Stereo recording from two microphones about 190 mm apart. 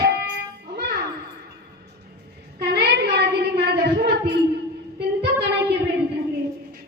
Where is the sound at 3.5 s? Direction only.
60° right (ahead or behind).